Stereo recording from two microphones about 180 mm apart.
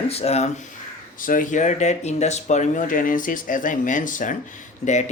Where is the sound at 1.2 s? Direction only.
50° left (ahead or behind).